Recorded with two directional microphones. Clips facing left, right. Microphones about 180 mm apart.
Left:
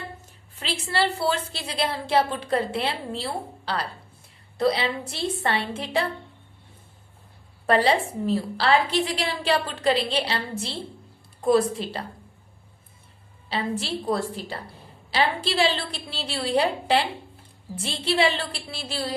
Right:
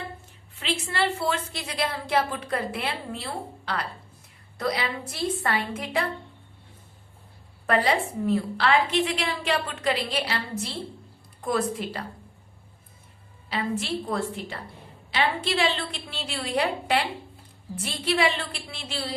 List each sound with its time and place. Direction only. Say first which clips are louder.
0.6 s a woman's voice: left 1 dB; 35° left (ahead or behind)
4.5 s a woman's voice: left 5 dB; 30° left (ahead or behind)
7.7 s a woman's voice: left 3 dB; 30° left (ahead or behind)
13.5 s a woman's voice: even; 30° left (ahead or behind)